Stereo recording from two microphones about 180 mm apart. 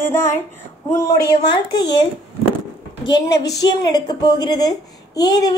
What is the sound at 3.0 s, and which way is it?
A woman's voice, 20° left (ahead or behind).